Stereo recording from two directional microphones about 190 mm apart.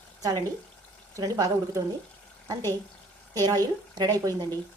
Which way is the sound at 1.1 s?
15° right (ahead or behind).